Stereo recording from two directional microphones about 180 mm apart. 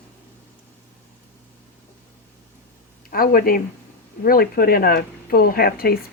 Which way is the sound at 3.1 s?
55° left (ahead or behind).